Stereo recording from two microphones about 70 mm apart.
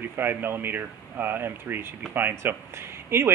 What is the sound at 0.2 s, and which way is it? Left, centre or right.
Speech, right.